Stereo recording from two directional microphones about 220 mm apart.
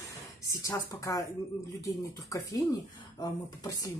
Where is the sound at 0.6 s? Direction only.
15° left (ahead or behind).